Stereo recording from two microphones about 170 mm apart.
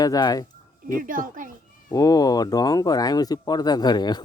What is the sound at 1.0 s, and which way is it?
Speech, 55° right (ahead or behind).